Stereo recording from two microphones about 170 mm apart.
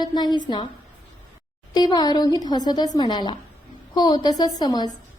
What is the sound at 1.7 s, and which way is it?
A woman's voice, 25° left (ahead or behind).